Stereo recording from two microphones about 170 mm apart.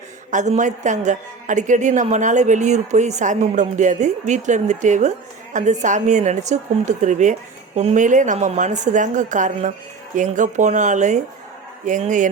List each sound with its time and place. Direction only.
0.3 s a woman's voice: 45° right (ahead or behind)